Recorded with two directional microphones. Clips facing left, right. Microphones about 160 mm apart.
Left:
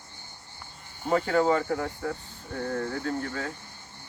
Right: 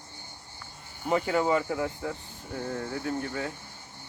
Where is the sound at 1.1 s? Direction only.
15° right (ahead or behind).